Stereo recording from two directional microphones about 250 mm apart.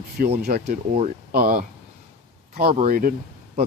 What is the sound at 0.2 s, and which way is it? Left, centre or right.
Speech, right.